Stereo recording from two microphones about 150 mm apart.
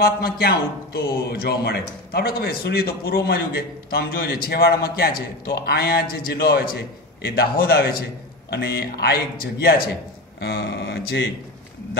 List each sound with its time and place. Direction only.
0.0 s a man's voice: 90° left